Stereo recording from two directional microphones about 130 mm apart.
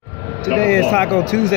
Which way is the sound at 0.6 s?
15° left (ahead or behind).